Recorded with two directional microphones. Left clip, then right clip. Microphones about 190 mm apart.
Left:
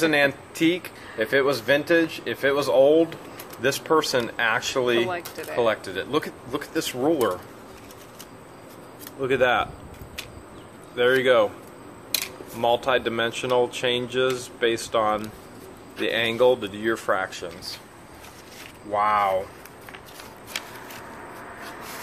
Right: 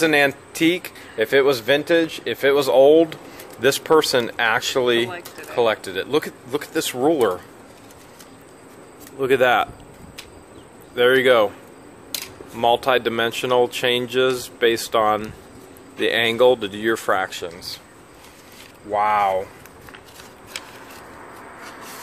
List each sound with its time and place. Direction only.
0.0 s speech: 45° right (ahead or behind)
9.2 s speech: 45° right (ahead or behind)
11.0 s speech: 45° right (ahead or behind)
12.5 s speech: 45° right (ahead or behind)
18.9 s speech: 40° right (ahead or behind)